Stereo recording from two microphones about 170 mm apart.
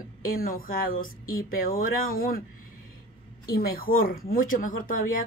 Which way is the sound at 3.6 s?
60° left (ahead or behind).